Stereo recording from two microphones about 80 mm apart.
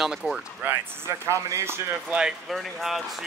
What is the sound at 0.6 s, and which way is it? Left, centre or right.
Speech, right.